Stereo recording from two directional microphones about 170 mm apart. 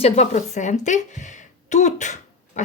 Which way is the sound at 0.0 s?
40° left (ahead or behind).